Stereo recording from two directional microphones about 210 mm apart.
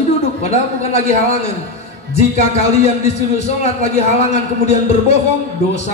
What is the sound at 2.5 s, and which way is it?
A man's voice, 30° left (ahead or behind).